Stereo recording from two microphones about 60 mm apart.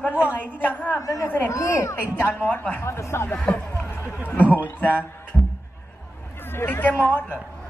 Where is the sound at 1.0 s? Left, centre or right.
Left.